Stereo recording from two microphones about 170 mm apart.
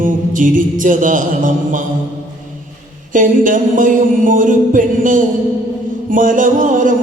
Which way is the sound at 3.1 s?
50° right (ahead or behind).